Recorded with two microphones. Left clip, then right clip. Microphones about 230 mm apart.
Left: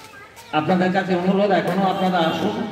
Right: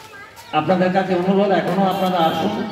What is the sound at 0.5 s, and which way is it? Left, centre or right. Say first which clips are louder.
Speech: right 2 dB; left.